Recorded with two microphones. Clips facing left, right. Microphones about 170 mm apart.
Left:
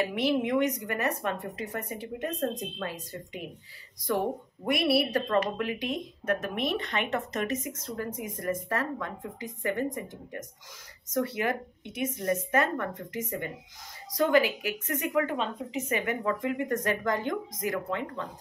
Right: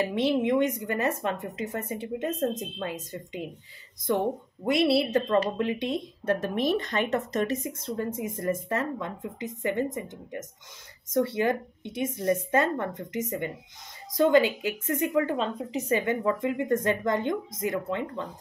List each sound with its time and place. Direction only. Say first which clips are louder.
0.0 s speech: right 2 dB; 30° right (ahead or behind)
4.6 s speech: right 3 dB; 25° right (ahead or behind)
11.1 s speech: right 4 dB; 30° right (ahead or behind)